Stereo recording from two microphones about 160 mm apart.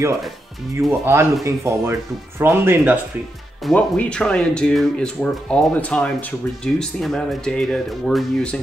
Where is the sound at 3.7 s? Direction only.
5° left (ahead or behind).